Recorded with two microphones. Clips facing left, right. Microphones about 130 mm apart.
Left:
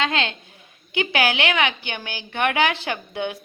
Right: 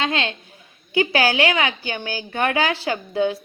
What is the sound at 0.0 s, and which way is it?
A woman's voice, 35° right (ahead or behind).